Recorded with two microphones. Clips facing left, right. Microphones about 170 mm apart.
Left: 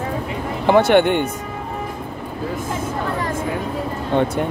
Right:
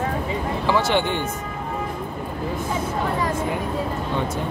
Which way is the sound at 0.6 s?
55° left (ahead or behind).